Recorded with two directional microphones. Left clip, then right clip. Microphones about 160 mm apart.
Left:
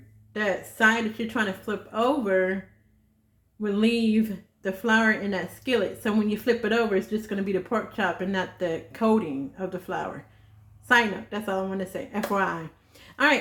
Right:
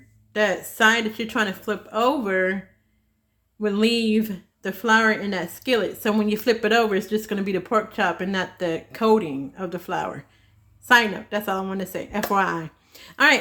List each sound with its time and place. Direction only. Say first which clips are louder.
0.3 s speech: right 5 dB; 65° right (ahead or behind)
3.6 s speech: right 4 dB; 55° right (ahead or behind)